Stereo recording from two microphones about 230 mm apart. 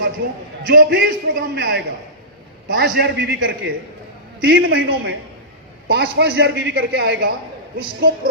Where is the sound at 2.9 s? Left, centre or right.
Right.